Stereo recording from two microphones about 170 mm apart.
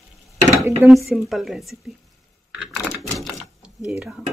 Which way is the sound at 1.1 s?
Centre (ahead or behind).